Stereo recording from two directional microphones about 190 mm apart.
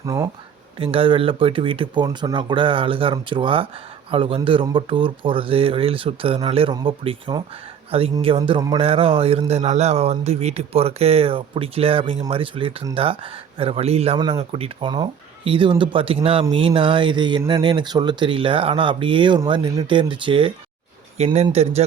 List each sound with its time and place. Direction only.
0.0 s speech: 15° right (ahead or behind)
0.8 s speech: 30° right (ahead or behind)